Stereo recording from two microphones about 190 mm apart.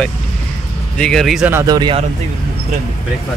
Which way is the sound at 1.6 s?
20° right (ahead or behind).